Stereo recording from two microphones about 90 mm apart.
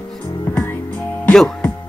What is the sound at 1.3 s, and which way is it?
Music, 5° left (ahead or behind).